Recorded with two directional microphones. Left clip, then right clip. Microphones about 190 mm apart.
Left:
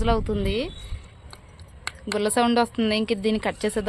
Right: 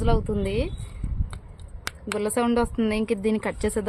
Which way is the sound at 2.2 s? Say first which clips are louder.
Left 3 dB; centre (ahead or behind).